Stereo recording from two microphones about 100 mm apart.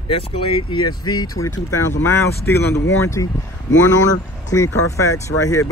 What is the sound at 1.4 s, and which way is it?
Speech, 30° left (ahead or behind).